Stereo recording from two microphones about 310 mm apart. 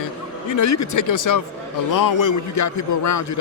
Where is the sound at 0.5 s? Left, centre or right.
Left.